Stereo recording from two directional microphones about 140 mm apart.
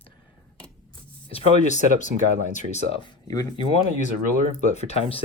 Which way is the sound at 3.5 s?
40° left (ahead or behind).